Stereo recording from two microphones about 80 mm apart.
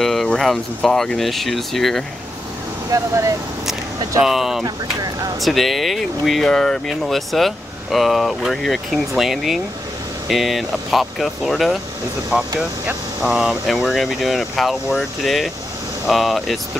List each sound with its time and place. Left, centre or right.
0.0 s speech: centre
2.9 s speech: right
4.2 s speech: centre
4.6 s speech: right
5.4 s speech: centre